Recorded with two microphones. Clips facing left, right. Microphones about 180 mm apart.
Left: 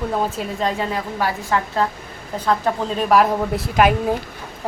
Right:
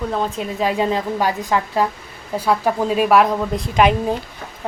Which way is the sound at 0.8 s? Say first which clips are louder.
Right 4 dB; 20° right (ahead or behind).